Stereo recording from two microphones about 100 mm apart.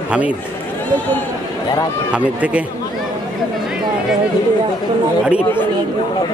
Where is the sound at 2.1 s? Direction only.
10° right (ahead or behind).